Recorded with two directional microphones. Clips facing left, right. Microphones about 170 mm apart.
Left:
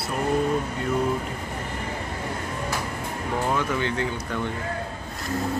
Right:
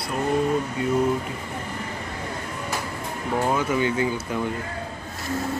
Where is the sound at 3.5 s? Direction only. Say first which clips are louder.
Right 3 dB; 10° right (ahead or behind).